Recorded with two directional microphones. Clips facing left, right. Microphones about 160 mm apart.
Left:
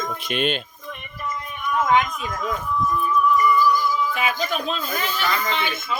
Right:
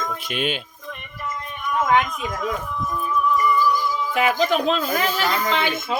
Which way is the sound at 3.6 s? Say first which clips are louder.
Left 1 dB; 25° right (ahead or behind).